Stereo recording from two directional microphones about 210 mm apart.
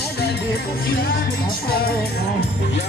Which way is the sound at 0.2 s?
50° left (ahead or behind).